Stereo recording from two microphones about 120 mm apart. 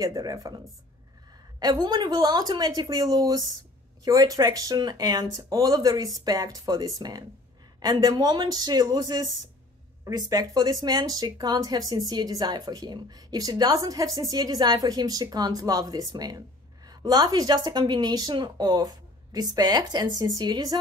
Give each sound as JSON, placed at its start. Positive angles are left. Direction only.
{"t": 0.0, "sound": "speech", "side_deg": -30}
{"t": 1.6, "sound": "speech", "side_deg": -35}